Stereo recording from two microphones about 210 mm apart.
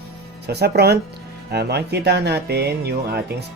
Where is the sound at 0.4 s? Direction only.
50° right (ahead or behind).